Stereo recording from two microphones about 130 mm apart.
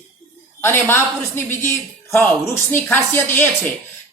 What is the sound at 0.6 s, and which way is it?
A woman's voice, 20° left (ahead or behind).